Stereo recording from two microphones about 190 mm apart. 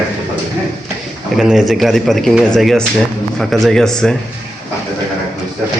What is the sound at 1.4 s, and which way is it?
Speech, centre (ahead or behind).